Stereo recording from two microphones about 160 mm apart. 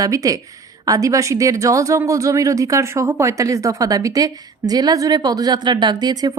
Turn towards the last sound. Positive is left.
turn(degrees=-25)  # may be behind; listen again after turning